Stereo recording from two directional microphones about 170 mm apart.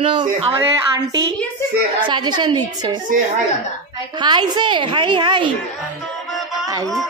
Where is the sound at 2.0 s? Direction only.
25° right (ahead or behind).